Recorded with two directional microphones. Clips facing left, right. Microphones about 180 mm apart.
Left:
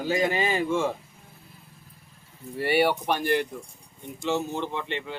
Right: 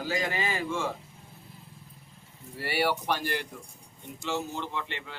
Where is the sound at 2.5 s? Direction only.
20° left (ahead or behind).